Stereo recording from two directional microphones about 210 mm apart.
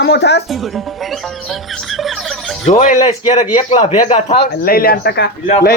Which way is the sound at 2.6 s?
35° left (ahead or behind).